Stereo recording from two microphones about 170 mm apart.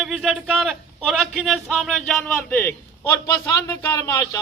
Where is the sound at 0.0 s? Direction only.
5° right (ahead or behind).